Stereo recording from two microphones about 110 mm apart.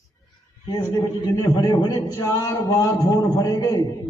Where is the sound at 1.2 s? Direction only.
35° left (ahead or behind).